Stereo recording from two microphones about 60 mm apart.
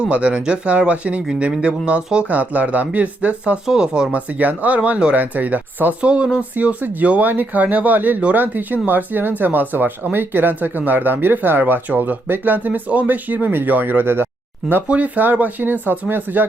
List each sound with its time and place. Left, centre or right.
0.0 s speech: centre
4.1 s speech: right
14.8 s speech: right